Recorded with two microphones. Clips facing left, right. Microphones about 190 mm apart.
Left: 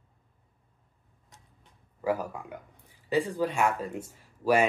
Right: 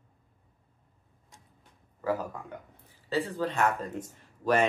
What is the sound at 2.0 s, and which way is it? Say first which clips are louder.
Speech: left 1 dB; 10° left (ahead or behind).